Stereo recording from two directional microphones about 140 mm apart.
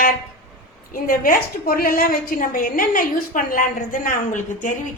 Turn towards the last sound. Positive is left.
turn(degrees=70)  # may be behind; listen again after turning